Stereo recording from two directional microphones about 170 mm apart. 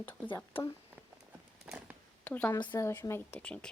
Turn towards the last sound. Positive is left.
turn(degrees=5)  # may be behind; listen again after turning